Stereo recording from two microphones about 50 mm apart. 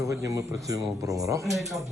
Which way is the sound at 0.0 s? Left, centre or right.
Right.